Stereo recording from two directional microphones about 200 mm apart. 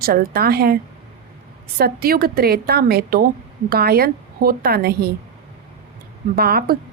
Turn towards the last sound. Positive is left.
turn(degrees=-50)  # may be behind; listen again after turning